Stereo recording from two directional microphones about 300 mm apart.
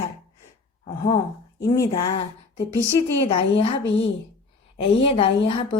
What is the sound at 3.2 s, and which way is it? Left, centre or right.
Speech, centre.